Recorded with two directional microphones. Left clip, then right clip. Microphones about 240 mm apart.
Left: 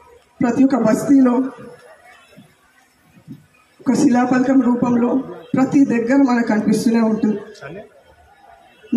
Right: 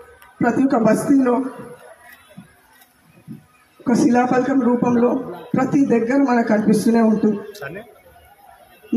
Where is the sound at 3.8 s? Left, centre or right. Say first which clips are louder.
Even; left.